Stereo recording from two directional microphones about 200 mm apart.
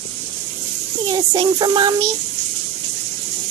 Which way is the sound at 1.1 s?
25° right (ahead or behind).